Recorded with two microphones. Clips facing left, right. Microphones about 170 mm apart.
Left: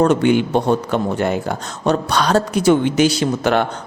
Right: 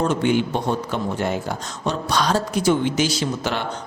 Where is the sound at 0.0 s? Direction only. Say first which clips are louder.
Left 5 dB; 65° left (ahead or behind).